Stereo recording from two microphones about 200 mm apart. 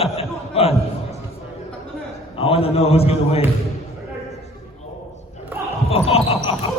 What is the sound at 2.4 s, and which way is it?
A man's voice, 30° left (ahead or behind).